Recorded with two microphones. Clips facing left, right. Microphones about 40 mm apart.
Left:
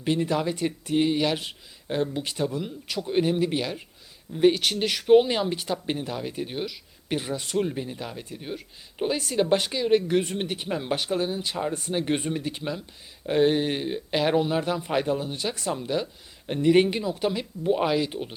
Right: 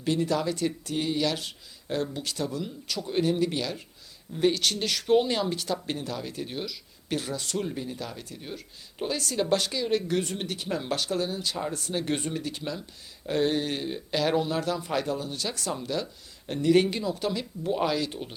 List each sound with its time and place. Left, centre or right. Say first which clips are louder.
0.0 s speech: left 1 dB; left